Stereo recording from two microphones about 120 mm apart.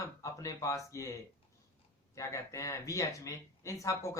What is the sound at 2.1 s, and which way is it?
Speech, 25° left (ahead or behind).